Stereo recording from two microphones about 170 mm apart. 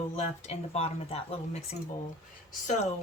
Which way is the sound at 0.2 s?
35° left (ahead or behind).